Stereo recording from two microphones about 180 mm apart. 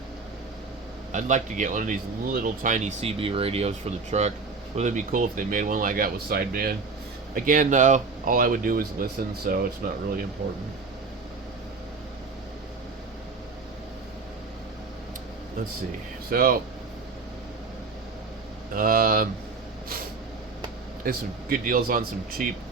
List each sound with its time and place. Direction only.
1.1 s speech: 45° right (ahead or behind)
16.3 s speech: 55° right (ahead or behind)
18.7 s speech: 50° right (ahead or behind)
21.0 s speech: 50° right (ahead or behind)